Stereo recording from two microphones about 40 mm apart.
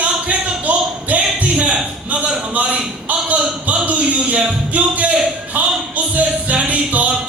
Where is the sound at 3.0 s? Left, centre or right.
Right.